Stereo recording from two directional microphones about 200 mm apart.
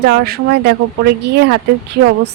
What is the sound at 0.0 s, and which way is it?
Speech, 50° right (ahead or behind).